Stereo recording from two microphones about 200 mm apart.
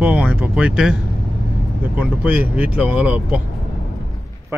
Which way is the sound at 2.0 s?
5° right (ahead or behind).